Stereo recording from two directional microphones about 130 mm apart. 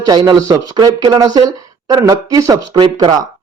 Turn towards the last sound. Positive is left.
turn(degrees=-35)  # may be behind; listen again after turning